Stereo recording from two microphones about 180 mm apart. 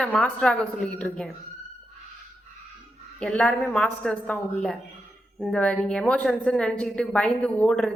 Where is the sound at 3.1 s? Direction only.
5° left (ahead or behind).